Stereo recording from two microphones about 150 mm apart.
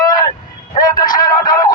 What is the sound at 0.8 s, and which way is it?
Music, 25° left (ahead or behind).